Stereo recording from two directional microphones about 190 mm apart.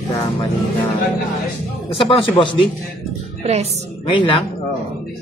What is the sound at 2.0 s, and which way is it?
Speech, 30° left (ahead or behind).